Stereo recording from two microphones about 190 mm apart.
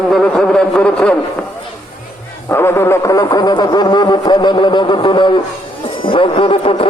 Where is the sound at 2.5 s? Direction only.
15° left (ahead or behind).